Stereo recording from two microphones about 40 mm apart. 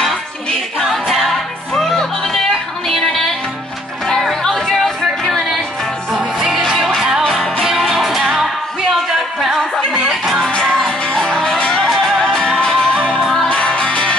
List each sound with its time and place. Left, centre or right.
0.7 s a capella: centre
2.0 s music: centre
6.1 s music: centre
7.6 s music: centre
10.6 s music: centre
12.5 s music: centre